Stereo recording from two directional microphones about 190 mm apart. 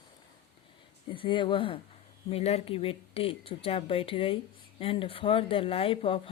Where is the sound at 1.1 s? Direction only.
25° left (ahead or behind).